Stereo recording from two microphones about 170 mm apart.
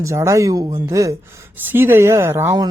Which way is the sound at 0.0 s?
15° right (ahead or behind).